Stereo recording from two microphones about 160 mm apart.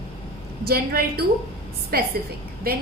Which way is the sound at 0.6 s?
70° right (ahead or behind).